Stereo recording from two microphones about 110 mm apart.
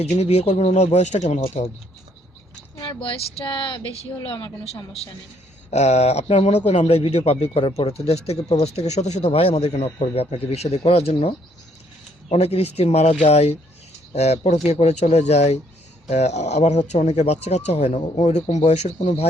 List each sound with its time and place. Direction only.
0.0 s speech: 70° left (ahead or behind)
3.0 s speech: 55° left (ahead or behind)
5.7 s speech: 80° left
9.2 s a man's voice: 60° left (ahead or behind); by 14.6 s 80° left
14.7 s speech: 90° left
16.0 s speech: 90° left